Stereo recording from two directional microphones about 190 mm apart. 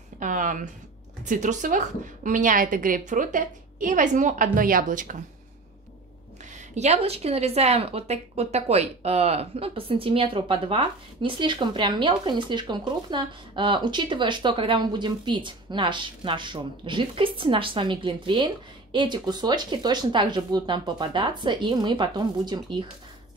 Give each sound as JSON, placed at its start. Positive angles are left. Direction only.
{"t": 0.2, "sound": "a woman's voice", "side_deg": -45}
{"t": 6.7, "sound": "speech", "side_deg": -35}